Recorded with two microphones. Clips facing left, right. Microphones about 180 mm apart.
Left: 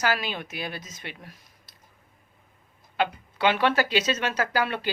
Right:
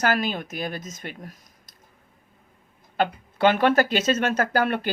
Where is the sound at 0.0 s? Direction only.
50° right (ahead or behind).